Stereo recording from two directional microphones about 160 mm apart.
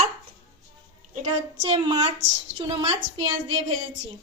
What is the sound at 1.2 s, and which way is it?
A woman's voice, 30° right (ahead or behind).